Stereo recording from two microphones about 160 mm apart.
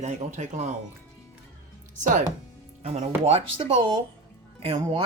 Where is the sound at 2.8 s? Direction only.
45° right (ahead or behind).